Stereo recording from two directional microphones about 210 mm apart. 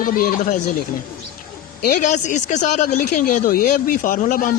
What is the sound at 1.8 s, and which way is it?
Speech, 40° left (ahead or behind).